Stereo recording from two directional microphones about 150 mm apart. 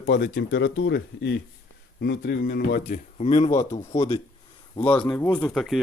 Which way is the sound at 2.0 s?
85° left.